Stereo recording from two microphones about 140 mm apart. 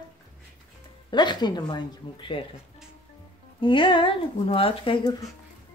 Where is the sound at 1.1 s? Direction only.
30° left (ahead or behind).